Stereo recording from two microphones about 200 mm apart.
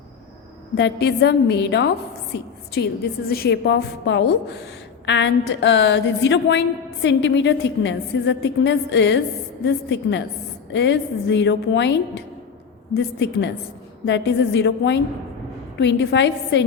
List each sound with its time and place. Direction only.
0.8 s a woman's voice: 60° left (ahead or behind)